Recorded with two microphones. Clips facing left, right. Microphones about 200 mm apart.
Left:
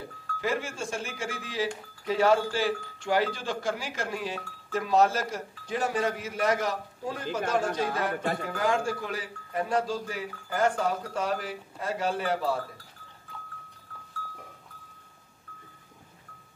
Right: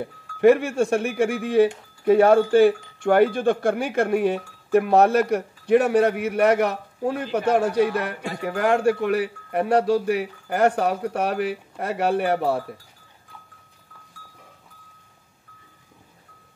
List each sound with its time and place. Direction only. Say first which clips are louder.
0.4 s speech: right 15 dB; 65° right (ahead or behind)